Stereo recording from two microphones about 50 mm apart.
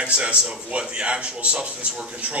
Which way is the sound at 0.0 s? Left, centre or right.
Right.